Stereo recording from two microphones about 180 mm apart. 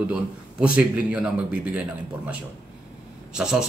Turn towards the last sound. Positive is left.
turn(degrees=-5)  # may be behind; listen again after turning